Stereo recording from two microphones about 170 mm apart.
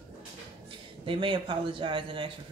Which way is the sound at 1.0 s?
30° right (ahead or behind).